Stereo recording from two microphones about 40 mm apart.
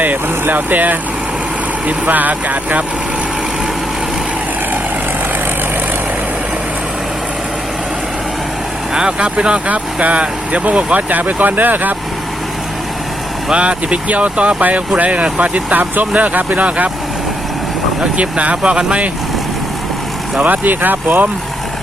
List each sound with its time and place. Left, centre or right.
0.0 s speech: right
8.9 s speech: right
13.5 s speech: right
16.6 s speech: right
18.2 s speech: right
20.4 s speech: right